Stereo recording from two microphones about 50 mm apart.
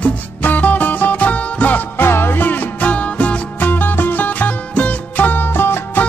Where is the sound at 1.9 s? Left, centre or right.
Left.